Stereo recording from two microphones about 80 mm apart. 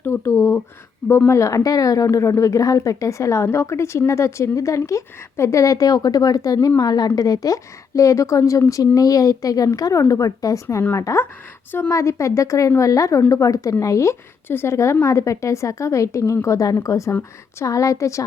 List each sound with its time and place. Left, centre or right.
0.0 s a sound: left
1.3 s a woman's voice: left
17.1 s a woman's voice: left
17.7 s a woman's voice: left